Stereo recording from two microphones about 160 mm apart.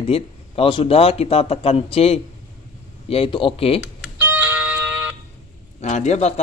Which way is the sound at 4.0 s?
10° right (ahead or behind).